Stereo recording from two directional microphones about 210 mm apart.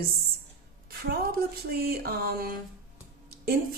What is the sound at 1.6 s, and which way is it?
Speech, 50° right (ahead or behind).